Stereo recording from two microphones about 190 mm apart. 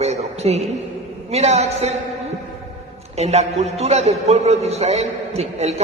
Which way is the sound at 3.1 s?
35° right (ahead or behind).